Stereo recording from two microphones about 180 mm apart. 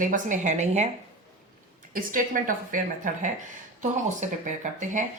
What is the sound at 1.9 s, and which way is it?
Speech, 50° right (ahead or behind).